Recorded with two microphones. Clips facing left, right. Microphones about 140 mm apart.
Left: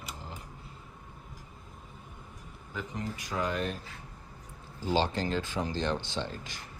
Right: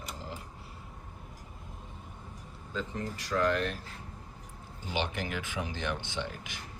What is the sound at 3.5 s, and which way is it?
Speech, centre (ahead or behind).